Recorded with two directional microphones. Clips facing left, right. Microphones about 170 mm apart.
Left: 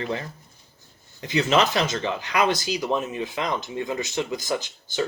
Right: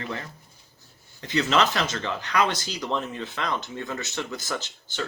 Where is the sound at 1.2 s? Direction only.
15° left (ahead or behind).